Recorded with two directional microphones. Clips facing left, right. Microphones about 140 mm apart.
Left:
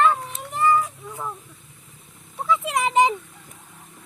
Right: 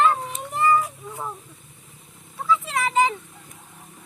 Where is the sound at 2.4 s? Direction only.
15° left (ahead or behind).